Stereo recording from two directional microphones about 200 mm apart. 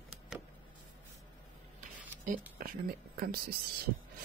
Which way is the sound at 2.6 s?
50° right (ahead or behind).